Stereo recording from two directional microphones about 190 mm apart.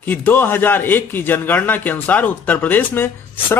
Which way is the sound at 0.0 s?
10° left (ahead or behind).